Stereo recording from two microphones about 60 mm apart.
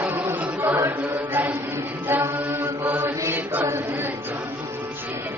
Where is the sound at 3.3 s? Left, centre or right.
Right.